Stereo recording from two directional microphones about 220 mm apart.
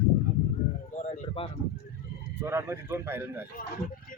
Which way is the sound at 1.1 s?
25° left (ahead or behind).